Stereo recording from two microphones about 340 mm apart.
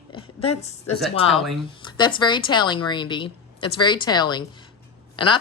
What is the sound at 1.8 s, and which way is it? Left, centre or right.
Speech, centre.